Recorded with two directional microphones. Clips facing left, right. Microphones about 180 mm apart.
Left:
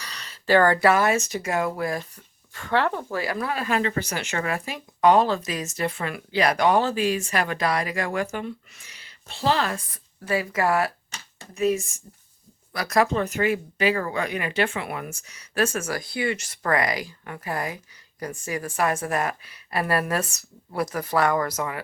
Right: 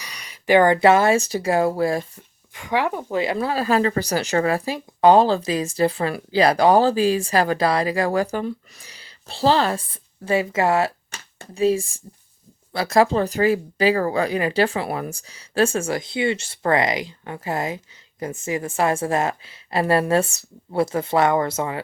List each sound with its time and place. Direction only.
0.0 s speech: 15° right (ahead or behind)
2.6 s speech: 15° right (ahead or behind)